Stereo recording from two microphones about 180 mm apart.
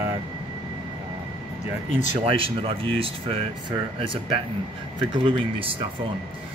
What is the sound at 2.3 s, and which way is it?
Speech, 30° right (ahead or behind).